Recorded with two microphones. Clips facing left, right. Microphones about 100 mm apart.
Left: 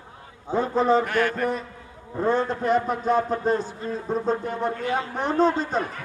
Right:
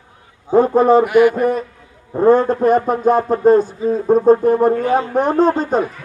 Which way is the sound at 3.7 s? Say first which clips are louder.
Right 12 dB; 5° right (ahead or behind).